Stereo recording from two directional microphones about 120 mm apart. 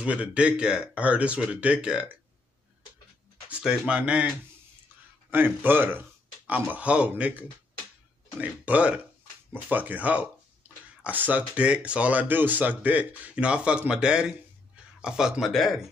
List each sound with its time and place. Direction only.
0.0 s speech: 10° right (ahead or behind)
3.4 s speech: 5° right (ahead or behind)
5.3 s speech: 15° right (ahead or behind); by 15.8 s centre (ahead or behind)